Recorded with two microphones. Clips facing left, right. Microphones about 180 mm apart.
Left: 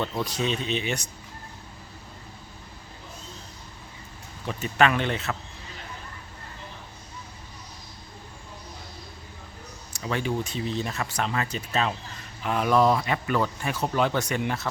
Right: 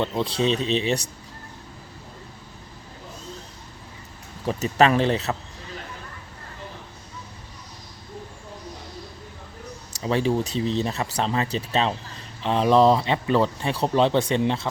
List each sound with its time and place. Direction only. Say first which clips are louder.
0.0 s speech: right 5 dB; 20° right (ahead or behind)
4.4 s speech: right 4 dB; 35° right (ahead or behind)
10.0 s speech: right 6 dB; 30° right (ahead or behind)